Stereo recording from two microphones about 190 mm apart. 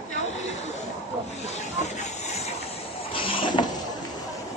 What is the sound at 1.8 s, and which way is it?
Vehicle, 35° left (ahead or behind).